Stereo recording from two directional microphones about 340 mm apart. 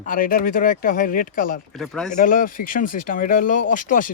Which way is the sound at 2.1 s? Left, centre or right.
Left.